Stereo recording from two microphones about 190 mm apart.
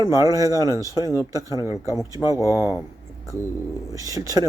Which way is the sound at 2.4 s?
10° right (ahead or behind).